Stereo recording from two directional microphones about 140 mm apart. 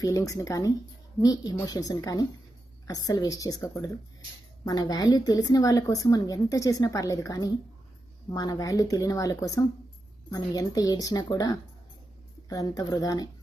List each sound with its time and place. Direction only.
0.0 s a woman's voice: 25° left (ahead or behind)